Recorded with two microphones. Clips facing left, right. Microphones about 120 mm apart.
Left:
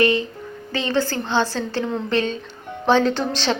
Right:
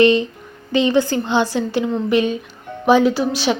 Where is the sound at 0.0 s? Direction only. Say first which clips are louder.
Right 5 dB; 20° right (ahead or behind).